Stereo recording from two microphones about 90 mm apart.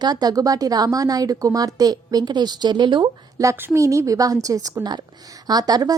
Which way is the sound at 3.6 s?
25° right (ahead or behind).